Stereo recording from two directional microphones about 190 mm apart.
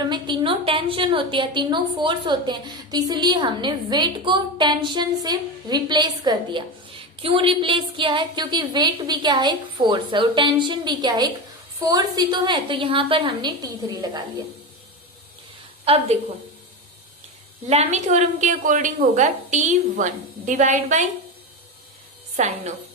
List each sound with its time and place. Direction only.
0.1 s a woman's voice: 25° right (ahead or behind)
15.8 s a woman's voice: 30° right (ahead or behind)
17.7 s speech: 35° right (ahead or behind)
22.4 s speech: 35° right (ahead or behind)